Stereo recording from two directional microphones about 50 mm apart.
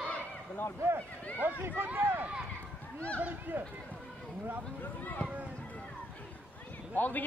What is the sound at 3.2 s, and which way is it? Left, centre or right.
Speech, right.